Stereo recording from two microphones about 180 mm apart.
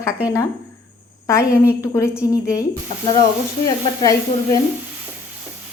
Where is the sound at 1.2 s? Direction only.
15° left (ahead or behind).